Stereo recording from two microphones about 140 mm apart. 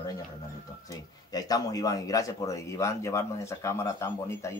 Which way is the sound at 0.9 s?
25° left (ahead or behind).